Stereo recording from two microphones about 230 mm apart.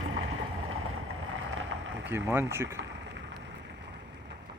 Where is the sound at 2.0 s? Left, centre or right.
Centre.